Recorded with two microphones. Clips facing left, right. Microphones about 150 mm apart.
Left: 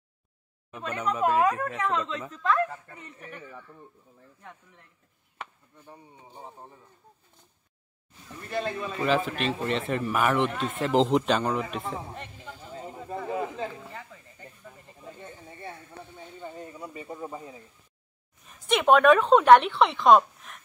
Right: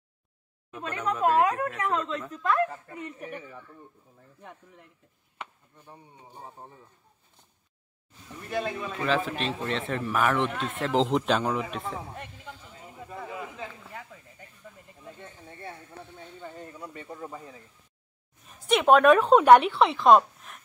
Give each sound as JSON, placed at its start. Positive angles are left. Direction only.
{"t": 0.9, "sound": "speech", "side_deg": 5}
{"t": 2.5, "sound": "a woman's voice", "side_deg": -10}
{"t": 8.3, "sound": "speech", "side_deg": -5}
{"t": 12.7, "sound": "a sound", "side_deg": 30}
{"t": 15.0, "sound": "speech", "side_deg": 5}
{"t": 18.4, "sound": "speech", "side_deg": 0}